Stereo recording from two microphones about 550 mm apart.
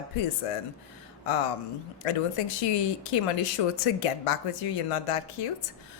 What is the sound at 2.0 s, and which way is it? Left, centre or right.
A woman's voice, left.